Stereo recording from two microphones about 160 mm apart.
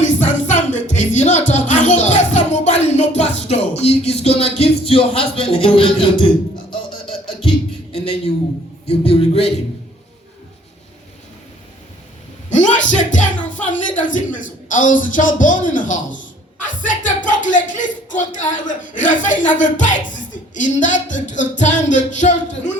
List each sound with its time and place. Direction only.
0.0 s music: 50° left (ahead or behind)
3.8 s speech: 40° left (ahead or behind)
8.9 s speech: 40° left (ahead or behind)
12.5 s speech: 50° left (ahead or behind)
16.6 s a sound: 55° left (ahead or behind)